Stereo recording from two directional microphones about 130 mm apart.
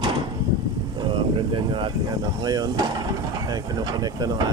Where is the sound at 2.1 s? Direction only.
25° right (ahead or behind).